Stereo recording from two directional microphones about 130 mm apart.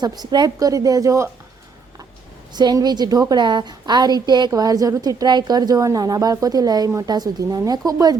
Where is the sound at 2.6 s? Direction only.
30° right (ahead or behind).